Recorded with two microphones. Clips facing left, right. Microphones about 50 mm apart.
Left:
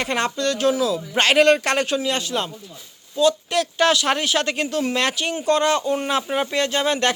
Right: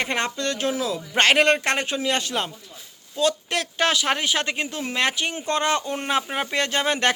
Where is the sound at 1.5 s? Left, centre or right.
Right.